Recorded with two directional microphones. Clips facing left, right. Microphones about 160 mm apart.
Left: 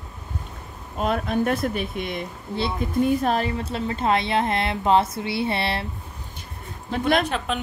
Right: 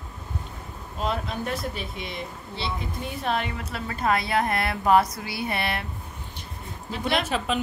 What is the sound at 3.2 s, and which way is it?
A woman's voice, 40° left (ahead or behind).